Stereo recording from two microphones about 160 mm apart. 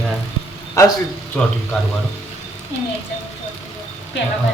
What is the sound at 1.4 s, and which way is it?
Speech, 5° left (ahead or behind).